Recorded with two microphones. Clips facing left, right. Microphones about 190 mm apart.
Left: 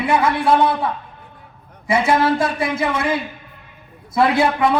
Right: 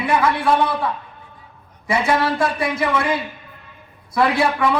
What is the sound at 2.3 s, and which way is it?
Speech, 25° left (ahead or behind).